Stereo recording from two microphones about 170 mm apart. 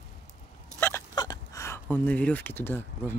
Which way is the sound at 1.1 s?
25° left (ahead or behind).